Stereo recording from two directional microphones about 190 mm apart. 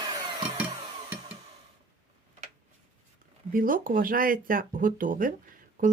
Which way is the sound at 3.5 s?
45° right (ahead or behind).